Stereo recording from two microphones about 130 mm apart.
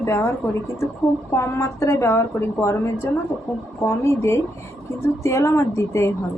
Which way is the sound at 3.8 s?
20° left (ahead or behind).